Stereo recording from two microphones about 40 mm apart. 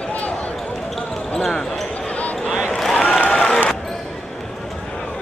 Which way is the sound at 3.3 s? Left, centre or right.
Centre.